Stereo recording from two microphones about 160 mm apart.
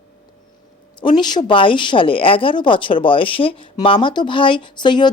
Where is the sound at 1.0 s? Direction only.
25° left (ahead or behind).